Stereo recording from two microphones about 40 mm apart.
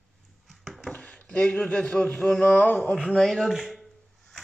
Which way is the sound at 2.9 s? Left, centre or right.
Centre.